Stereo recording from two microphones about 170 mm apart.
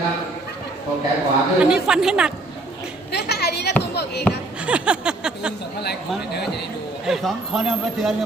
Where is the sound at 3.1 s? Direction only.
75° left (ahead or behind).